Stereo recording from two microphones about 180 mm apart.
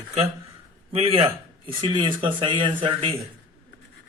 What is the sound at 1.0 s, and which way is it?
Speech, 35° right (ahead or behind).